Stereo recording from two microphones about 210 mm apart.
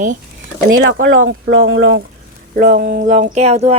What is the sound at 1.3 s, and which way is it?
Speech, 55° right (ahead or behind).